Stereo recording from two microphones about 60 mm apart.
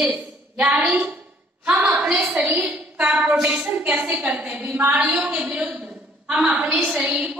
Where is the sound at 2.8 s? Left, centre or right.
Centre.